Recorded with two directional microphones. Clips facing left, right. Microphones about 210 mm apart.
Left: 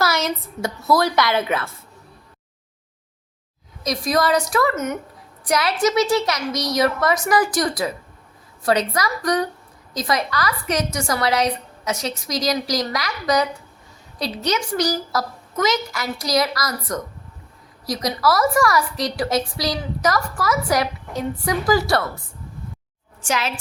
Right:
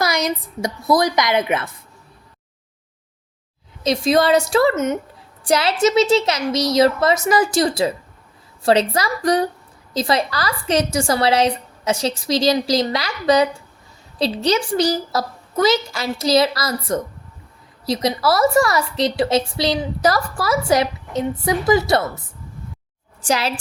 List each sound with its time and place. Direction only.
0.0 s a woman's voice: 15° right (ahead or behind)
3.8 s a woman's voice: 25° right (ahead or behind)
23.2 s a woman's voice: 35° right (ahead or behind)